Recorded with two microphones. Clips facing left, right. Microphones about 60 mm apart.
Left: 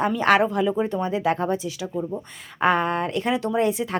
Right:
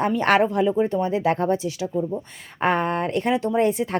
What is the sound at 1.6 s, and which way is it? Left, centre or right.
Speech, right.